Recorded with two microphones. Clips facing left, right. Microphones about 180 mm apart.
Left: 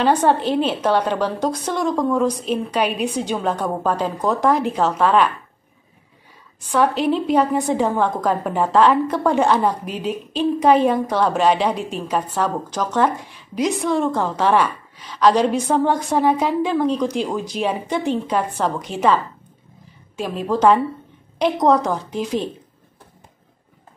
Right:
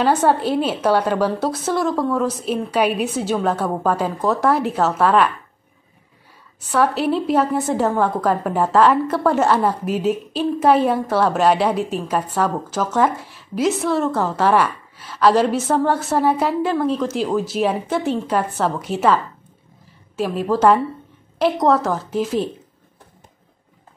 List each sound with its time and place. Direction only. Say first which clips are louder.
0.0 s a woman's voice: even; 10° right (ahead or behind)
6.6 s a woman's voice: even; 5° right (ahead or behind)